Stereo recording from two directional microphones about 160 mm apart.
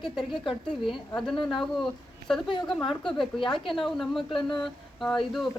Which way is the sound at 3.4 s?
30° left (ahead or behind).